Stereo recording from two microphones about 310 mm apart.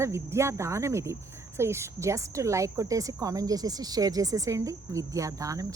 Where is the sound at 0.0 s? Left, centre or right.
Centre.